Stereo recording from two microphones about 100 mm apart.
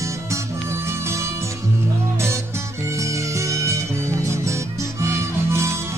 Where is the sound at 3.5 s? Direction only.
30° right (ahead or behind).